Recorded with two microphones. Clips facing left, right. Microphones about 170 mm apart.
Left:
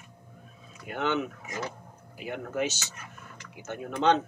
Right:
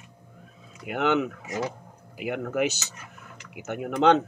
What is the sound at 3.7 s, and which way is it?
Speech, 75° right (ahead or behind).